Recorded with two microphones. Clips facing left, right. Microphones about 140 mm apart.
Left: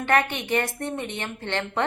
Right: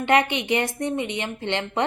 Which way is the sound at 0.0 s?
15° right (ahead or behind).